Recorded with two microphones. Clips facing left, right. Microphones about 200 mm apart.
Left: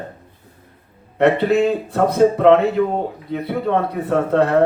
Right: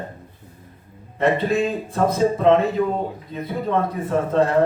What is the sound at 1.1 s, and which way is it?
Speech, 65° left (ahead or behind).